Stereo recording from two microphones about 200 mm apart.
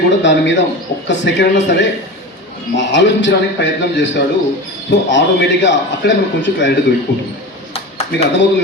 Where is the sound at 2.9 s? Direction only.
65° left (ahead or behind).